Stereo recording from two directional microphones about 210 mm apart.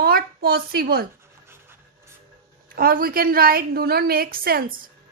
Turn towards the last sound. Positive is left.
turn(degrees=-45)  # may be behind; listen again after turning